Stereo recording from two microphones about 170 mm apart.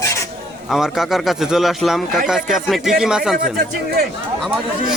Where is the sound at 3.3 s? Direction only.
60° right (ahead or behind).